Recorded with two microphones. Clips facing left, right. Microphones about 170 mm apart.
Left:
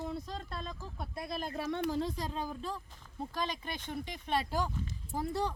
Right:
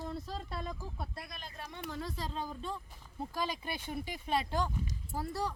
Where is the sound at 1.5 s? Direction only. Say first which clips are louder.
Left 13 dB; 70° left (ahead or behind).